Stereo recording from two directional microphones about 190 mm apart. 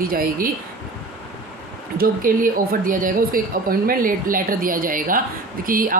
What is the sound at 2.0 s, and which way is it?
Speech, 45° right (ahead or behind).